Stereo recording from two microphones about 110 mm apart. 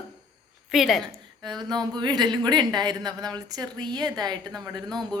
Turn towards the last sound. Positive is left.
turn(degrees=5)  # may be behind; listen again after turning